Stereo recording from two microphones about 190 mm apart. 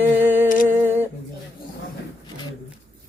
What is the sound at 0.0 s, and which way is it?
Humming, 10° right (ahead or behind).